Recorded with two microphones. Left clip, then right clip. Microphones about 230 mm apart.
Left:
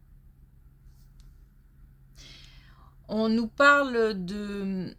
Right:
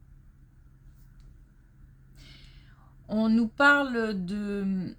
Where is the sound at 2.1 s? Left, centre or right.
Left.